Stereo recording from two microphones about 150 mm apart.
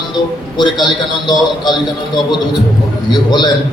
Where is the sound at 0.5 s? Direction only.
30° left (ahead or behind).